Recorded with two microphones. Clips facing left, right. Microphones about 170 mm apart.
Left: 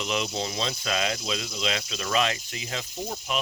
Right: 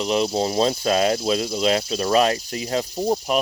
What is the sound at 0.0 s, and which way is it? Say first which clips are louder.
Cricket: right 8 dB; 35° right (ahead or behind).